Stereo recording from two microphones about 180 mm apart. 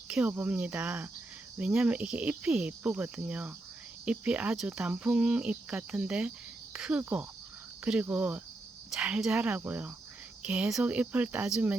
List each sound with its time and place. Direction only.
0.1 s speech: 10° right (ahead or behind)